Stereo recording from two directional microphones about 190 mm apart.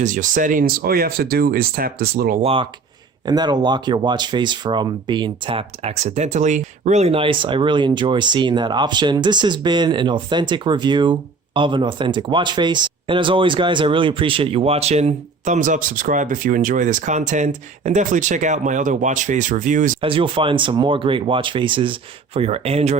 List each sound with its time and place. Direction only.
0.0 s speech: 40° right (ahead or behind)
2.4 s speech: 30° right (ahead or behind)
20.0 s speech: 25° right (ahead or behind)